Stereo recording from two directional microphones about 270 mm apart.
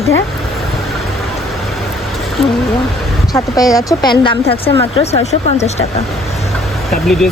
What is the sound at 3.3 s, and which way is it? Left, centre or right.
Speech, centre.